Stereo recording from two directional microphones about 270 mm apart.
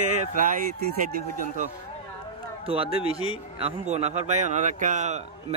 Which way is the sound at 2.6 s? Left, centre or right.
Right.